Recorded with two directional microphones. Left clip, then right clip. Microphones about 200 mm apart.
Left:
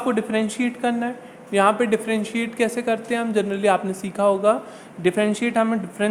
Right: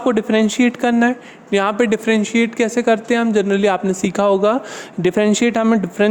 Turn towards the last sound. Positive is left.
turn(degrees=-45)  # may be behind; listen again after turning